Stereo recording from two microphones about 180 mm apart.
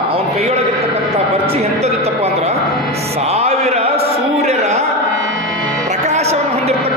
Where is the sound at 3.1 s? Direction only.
35° right (ahead or behind).